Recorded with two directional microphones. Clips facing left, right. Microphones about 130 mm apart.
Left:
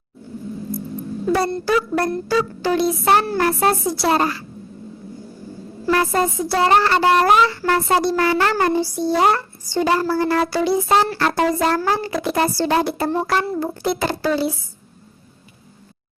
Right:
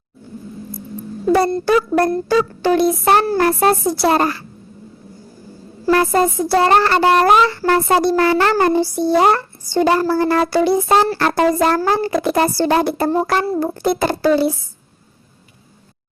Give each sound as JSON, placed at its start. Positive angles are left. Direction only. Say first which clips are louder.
{"t": 1.3, "sound": "speech", "louder": "right 5 dB", "side_deg": -45}
{"t": 5.8, "sound": "speech", "louder": "right 4 dB", "side_deg": -45}